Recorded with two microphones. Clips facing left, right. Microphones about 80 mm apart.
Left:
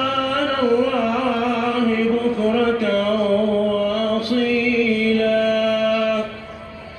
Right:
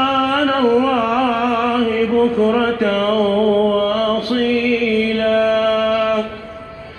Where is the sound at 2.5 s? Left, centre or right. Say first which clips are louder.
Right 2 dB; right.